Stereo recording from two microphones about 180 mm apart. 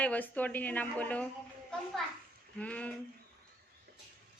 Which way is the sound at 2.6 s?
10° left (ahead or behind).